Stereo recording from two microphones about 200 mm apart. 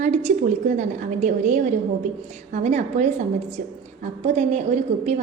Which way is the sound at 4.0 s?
35° right (ahead or behind).